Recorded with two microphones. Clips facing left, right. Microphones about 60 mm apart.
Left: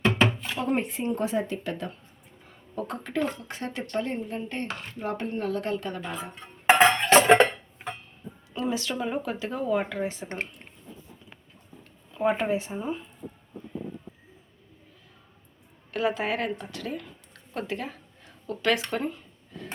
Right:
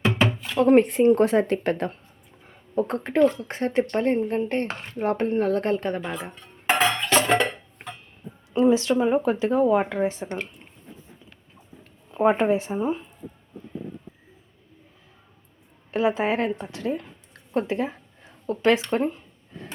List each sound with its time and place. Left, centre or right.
0.6 s speech: right
2.5 s speech: right
4.7 s speech: right
4.9 s a woman's voice: right
6.0 s speech: centre
6.7 s music: left
8.5 s a woman's voice: right
12.1 s a woman's voice: right
15.9 s speech: right
17.5 s a sound: right
18.9 s speech: right